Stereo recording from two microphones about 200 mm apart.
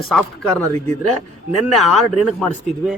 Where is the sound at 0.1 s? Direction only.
Centre (ahead or behind).